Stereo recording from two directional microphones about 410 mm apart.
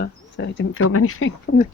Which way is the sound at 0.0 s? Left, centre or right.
Left.